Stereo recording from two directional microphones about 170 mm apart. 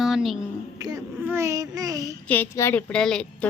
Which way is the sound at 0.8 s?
20° right (ahead or behind).